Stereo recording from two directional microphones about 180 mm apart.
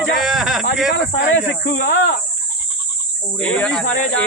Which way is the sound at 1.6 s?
60° left (ahead or behind).